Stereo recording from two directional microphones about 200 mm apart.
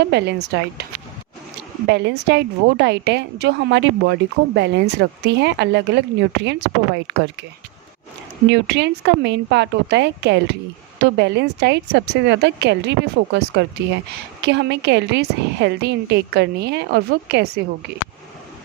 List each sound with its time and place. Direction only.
0.1 s a woman's voice: 55° right (ahead or behind)
1.9 s a woman's voice: 60° right (ahead or behind)
8.4 s a woman's voice: 60° right (ahead or behind)